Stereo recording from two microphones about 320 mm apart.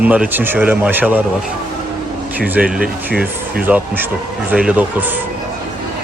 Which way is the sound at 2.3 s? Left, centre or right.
Centre.